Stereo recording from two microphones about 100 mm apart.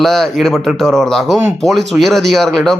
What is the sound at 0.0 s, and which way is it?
Speech, 5° left (ahead or behind).